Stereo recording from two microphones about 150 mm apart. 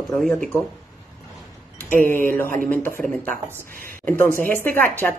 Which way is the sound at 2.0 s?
15° left (ahead or behind).